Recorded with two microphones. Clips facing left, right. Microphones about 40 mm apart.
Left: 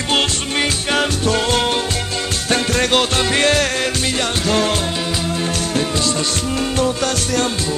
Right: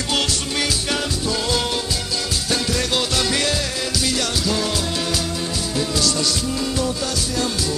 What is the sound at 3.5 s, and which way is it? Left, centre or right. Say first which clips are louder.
Music: left 6 dB; left.